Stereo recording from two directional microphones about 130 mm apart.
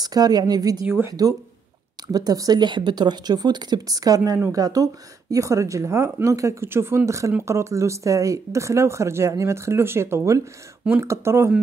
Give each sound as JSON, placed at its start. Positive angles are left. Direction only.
{"t": 0.0, "sound": "speech", "side_deg": -30}